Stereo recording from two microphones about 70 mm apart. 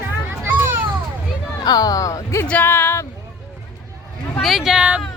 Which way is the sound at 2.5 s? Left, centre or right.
Left.